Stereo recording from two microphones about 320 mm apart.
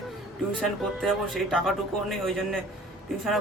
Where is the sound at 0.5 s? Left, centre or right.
Centre.